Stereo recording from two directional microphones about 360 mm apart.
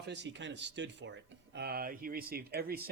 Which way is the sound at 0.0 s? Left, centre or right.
Right.